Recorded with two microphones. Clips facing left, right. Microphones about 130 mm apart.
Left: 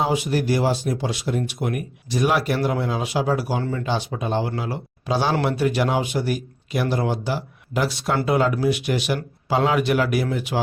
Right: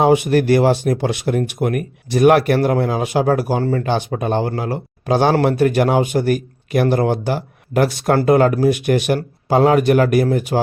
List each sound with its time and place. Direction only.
0.0 s speech: 60° right (ahead or behind)